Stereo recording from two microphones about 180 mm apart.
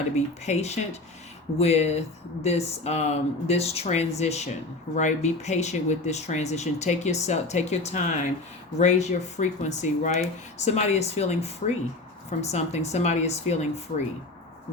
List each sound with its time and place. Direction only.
0.4 s speech: 35° left (ahead or behind)